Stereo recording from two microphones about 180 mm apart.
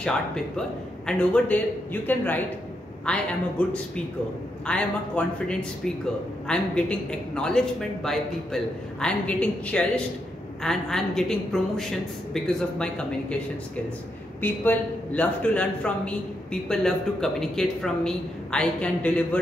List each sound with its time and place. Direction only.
0.6 s a woman's voice: 5° left (ahead or behind)
14.4 s a man's voice: 10° left (ahead or behind)